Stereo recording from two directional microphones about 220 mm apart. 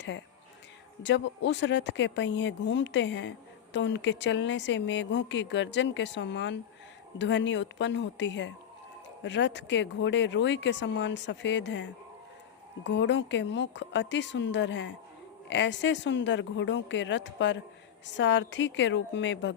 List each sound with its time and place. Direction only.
1.0 s speech: 55° left (ahead or behind)